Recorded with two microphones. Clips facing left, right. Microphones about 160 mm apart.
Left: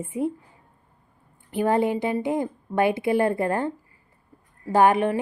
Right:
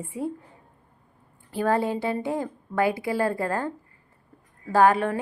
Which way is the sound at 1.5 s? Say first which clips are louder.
Left 2 dB; 20° left (ahead or behind).